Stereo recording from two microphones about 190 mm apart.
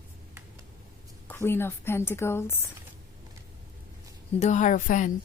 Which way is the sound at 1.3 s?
10° left (ahead or behind).